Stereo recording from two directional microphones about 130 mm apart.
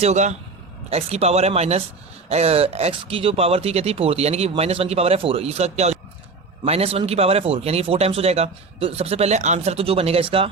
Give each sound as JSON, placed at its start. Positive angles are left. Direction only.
{"t": 0.0, "sound": "speech", "side_deg": -60}